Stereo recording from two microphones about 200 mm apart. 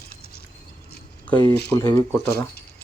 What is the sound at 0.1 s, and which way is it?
Rodents, 50° left (ahead or behind).